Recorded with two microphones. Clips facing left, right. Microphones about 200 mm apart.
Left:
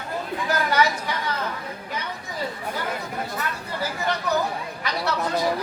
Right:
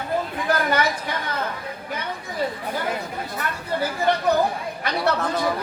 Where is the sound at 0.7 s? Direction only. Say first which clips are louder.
Even; 50° right (ahead or behind).